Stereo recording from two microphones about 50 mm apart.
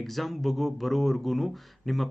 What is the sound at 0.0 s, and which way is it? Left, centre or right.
Speech, centre.